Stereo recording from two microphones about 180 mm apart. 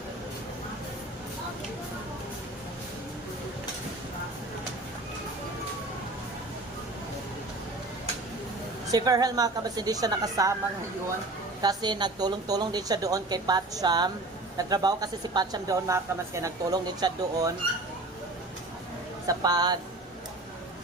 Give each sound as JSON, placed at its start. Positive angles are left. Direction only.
{"t": 8.9, "sound": "a woman's voice", "side_deg": -20}
{"t": 11.6, "sound": "a woman's voice", "side_deg": -25}
{"t": 19.3, "sound": "a woman's voice", "side_deg": -20}